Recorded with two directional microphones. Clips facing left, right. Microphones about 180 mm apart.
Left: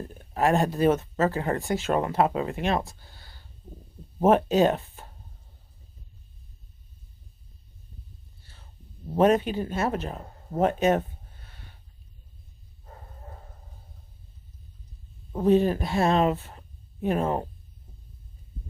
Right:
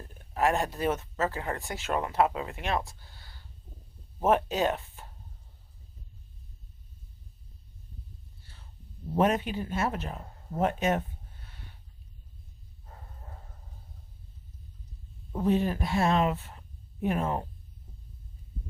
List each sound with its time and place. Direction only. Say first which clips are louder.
0.0 s speech: left 3 dB; 30° left (ahead or behind)
9.1 s speech: left 5 dB; 35° left (ahead or behind)
15.4 s speech: left 6 dB; 30° left (ahead or behind)